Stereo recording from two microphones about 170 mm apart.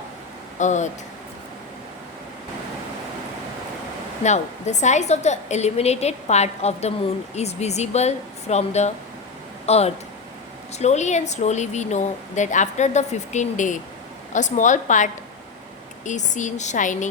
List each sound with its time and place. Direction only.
0.6 s a woman's voice: 45° left (ahead or behind)
4.2 s a woman's voice: 45° left (ahead or behind)